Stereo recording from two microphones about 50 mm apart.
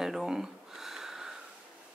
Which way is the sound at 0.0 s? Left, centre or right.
Centre.